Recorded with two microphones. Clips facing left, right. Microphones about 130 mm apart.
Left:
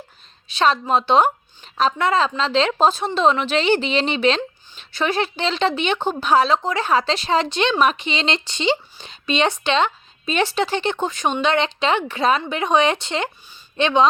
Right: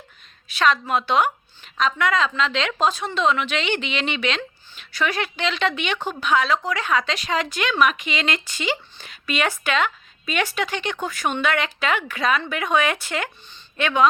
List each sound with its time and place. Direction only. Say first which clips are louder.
0.4 s a woman's voice: left 2 dB; 30° left (ahead or behind)